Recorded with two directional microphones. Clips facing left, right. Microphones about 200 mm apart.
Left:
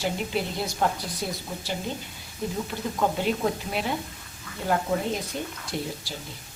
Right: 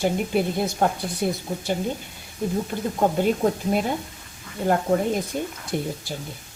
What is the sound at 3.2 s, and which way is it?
Speech, 45° right (ahead or behind).